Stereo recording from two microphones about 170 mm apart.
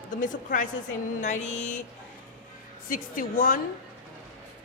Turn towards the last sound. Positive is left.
turn(degrees=55)  # may be behind; listen again after turning